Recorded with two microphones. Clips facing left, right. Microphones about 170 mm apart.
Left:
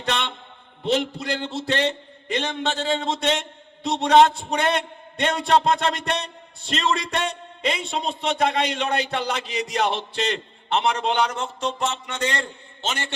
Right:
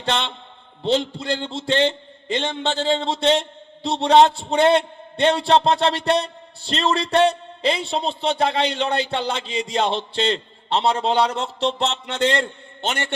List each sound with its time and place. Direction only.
0.0 s a sound: 30° right (ahead or behind)
0.9 s a man's voice: 25° right (ahead or behind)
12.1 s a man's voice: 60° right (ahead or behind)